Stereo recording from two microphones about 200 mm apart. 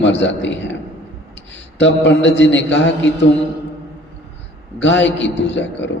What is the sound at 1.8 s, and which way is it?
A man's voice, 65° left (ahead or behind).